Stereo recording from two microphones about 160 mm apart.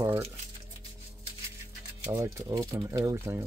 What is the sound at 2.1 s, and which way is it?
Speech, 20° right (ahead or behind).